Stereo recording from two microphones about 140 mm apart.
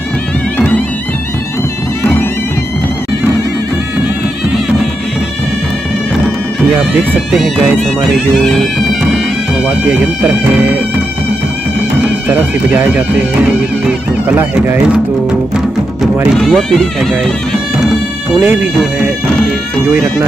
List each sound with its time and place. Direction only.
6.9 s speech: centre (ahead or behind)
9.7 s speech: 10° right (ahead or behind)
12.0 s speech: 10° right (ahead or behind)
13.5 s music: 10° right (ahead or behind)
16.3 s speech: centre (ahead or behind)
17.2 s music: 5° left (ahead or behind)
18.4 s speech: 15° right (ahead or behind)
19.9 s speech: 25° right (ahead or behind)